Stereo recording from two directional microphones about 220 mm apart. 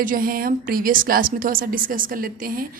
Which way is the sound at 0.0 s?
40° right (ahead or behind).